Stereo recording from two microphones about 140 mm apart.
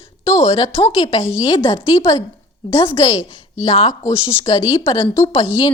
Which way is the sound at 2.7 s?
35° left (ahead or behind).